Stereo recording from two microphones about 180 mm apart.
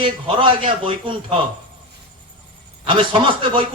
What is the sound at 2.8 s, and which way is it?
Speech, 30° right (ahead or behind).